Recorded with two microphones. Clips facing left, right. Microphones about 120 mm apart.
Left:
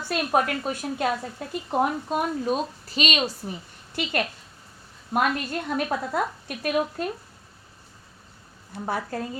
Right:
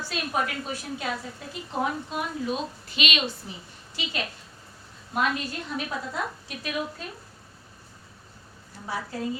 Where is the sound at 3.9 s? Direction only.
55° left (ahead or behind).